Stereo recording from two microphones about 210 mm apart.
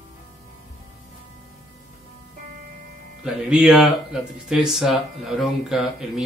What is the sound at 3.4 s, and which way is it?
Speech, 5° right (ahead or behind).